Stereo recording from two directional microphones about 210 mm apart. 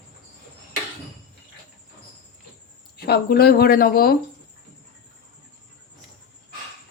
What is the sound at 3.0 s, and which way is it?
Speech, 45° left (ahead or behind).